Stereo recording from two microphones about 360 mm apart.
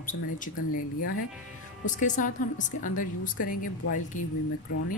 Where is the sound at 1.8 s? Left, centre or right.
Left.